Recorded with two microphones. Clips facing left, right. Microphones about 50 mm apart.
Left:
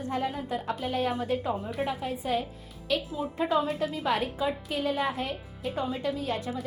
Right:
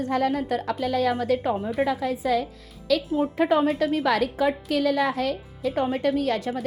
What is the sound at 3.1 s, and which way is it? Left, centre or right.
A woman's voice, right.